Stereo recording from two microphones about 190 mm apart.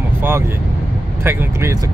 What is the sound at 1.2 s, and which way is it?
Speech, 10° right (ahead or behind).